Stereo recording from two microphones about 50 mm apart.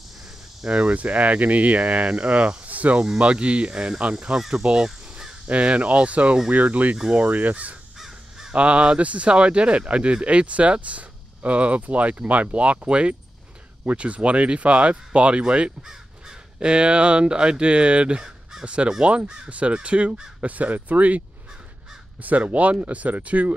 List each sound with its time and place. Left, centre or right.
0.7 s speech: right
4.4 s cricket: centre
4.6 s crow: centre
5.5 s speech: right
8.0 s crow: centre
8.5 s speech: right
22.2 s speech: right